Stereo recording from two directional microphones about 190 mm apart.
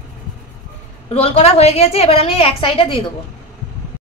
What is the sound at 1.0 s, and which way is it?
A woman's voice, 30° left (ahead or behind).